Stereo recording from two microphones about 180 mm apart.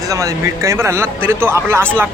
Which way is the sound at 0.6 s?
15° right (ahead or behind).